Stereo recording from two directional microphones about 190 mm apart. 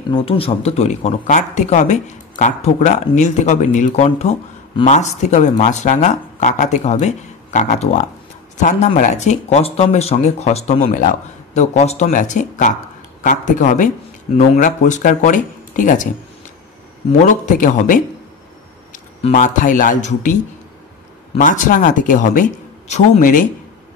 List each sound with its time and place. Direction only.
0.1 s speech: 30° left (ahead or behind)
17.2 s speech: 45° left (ahead or behind)
21.4 s speech: 45° left (ahead or behind)